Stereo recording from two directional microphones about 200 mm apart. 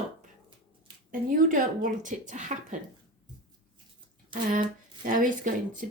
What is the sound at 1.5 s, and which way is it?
Speech, 40° right (ahead or behind).